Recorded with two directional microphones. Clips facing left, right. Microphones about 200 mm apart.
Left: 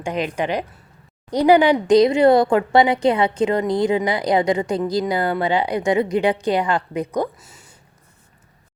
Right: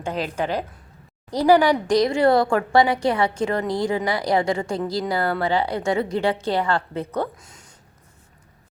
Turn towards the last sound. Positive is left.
turn(degrees=10)  # may be behind; listen again after turning